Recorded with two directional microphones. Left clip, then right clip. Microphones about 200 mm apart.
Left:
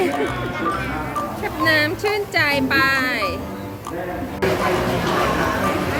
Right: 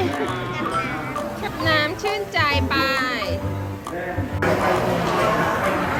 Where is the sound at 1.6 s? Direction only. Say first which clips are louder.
Left 3 dB; 20° left (ahead or behind).